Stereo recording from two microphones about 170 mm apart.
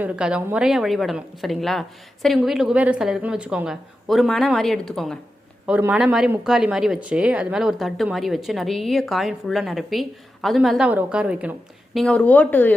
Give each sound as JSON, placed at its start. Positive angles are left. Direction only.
{"t": 0.0, "sound": "speech", "side_deg": -5}
{"t": 11.9, "sound": "speech", "side_deg": 5}